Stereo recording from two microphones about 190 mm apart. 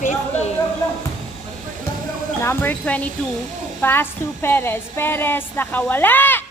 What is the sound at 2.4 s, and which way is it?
A woman's voice, 10° left (ahead or behind).